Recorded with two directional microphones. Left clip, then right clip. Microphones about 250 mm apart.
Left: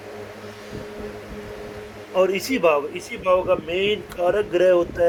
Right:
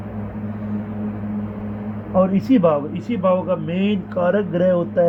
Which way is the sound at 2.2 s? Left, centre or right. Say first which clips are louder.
Right 2 dB; left.